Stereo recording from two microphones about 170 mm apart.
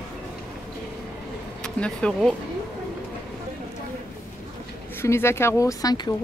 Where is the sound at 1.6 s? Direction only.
5° left (ahead or behind).